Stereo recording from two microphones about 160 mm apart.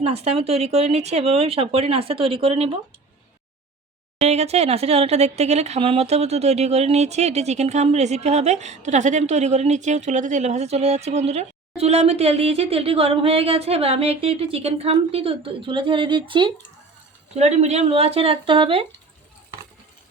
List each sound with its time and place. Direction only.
0.0 s speech: 40° right (ahead or behind)
4.2 s speech: 40° right (ahead or behind)
17.3 s speech: 45° right (ahead or behind)